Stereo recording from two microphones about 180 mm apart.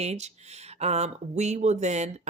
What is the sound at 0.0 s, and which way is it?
Speech, 40° right (ahead or behind).